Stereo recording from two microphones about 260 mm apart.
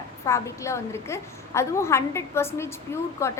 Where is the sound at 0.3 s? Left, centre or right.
Centre.